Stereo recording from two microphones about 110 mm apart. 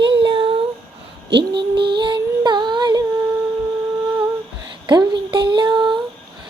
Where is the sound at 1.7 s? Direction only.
45° right (ahead or behind).